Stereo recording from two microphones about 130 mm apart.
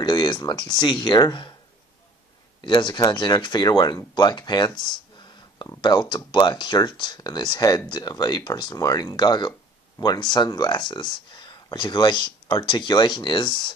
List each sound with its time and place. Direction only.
0.0 s speech: 35° left (ahead or behind)
2.6 s speech: 35° left (ahead or behind)